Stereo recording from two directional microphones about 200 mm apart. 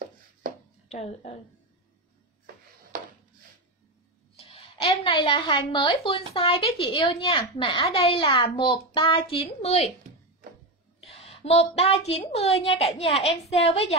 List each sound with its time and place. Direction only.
0.8 s a woman's voice: 35° left (ahead or behind)
4.4 s a woman's voice: 30° left (ahead or behind)
11.0 s a sound: 30° left (ahead or behind)
12.1 s a woman's voice: 30° left (ahead or behind)